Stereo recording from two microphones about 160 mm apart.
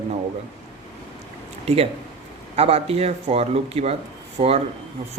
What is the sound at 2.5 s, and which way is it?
Speech, 40° right (ahead or behind).